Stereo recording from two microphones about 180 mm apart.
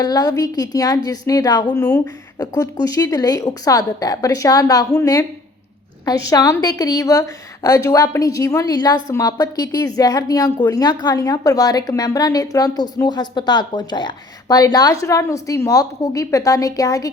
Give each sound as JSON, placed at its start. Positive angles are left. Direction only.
{"t": 0.0, "sound": "a woman's voice", "side_deg": 20}